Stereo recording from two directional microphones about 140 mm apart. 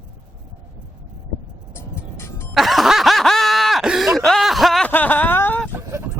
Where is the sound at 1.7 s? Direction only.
20° left (ahead or behind).